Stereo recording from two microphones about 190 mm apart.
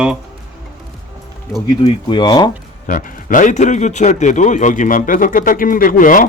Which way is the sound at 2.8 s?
45° left (ahead or behind).